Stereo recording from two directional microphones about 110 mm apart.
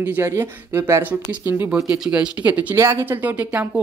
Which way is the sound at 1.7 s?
5° right (ahead or behind).